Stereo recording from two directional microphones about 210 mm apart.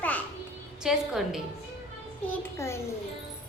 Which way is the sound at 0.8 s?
Centre (ahead or behind).